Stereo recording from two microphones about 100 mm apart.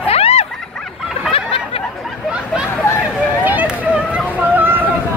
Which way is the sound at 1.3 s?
70° left (ahead or behind).